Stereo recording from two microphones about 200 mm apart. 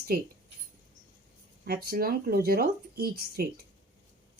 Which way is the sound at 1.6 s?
50° right (ahead or behind).